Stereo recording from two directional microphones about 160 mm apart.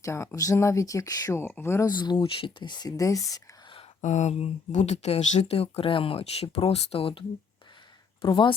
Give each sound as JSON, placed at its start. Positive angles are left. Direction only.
{"t": 0.0, "sound": "speech", "side_deg": 15}
{"t": 3.3, "sound": "whispering", "side_deg": 30}
{"t": 4.0, "sound": "speech", "side_deg": 50}